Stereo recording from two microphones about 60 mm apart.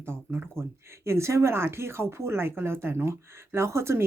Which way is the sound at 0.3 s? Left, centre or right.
Right.